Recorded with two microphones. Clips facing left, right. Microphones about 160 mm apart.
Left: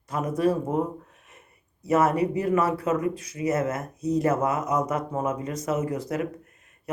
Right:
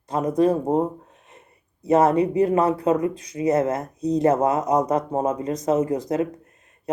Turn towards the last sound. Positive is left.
turn(degrees=-35)  # may be behind; listen again after turning